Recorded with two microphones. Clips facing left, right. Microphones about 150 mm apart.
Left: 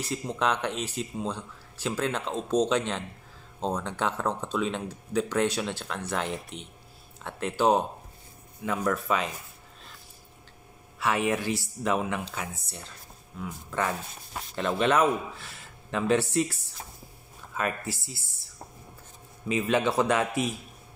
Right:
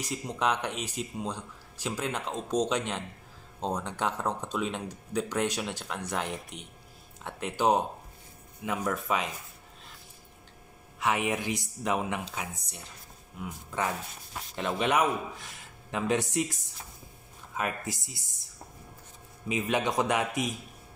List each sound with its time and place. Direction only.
0.0 s speech: 10° right (ahead or behind)
11.0 s speech: 20° right (ahead or behind)
14.6 s speech: 15° right (ahead or behind)
17.6 s speech: 15° right (ahead or behind)
19.5 s speech: 15° right (ahead or behind)